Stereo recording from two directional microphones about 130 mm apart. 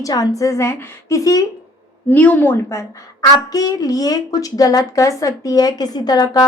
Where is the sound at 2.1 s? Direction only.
15° left (ahead or behind).